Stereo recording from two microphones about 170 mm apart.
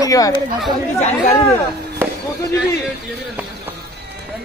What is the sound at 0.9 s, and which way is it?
Speech, 40° left (ahead or behind).